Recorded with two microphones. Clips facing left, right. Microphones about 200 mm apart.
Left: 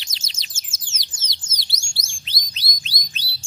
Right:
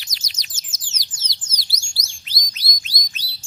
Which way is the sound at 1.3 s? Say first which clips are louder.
Even; 25° left (ahead or behind).